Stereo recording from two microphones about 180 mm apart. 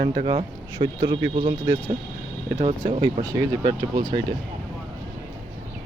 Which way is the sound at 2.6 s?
35° right (ahead or behind).